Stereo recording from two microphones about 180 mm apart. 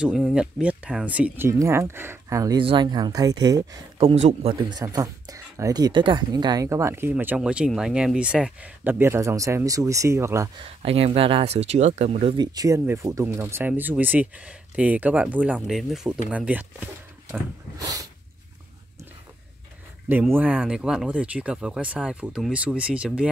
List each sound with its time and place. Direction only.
0.0 s speech: 5° right (ahead or behind); by 4.1 s 20° right (ahead or behind)
4.1 s speech: 35° right (ahead or behind)
4.6 s speech: 20° right (ahead or behind)
10.6 s speech: 30° right (ahead or behind)
12.5 s speech: 15° right (ahead or behind)
17.7 s speech: 20° right (ahead or behind)
20.1 s speech: 10° right (ahead or behind)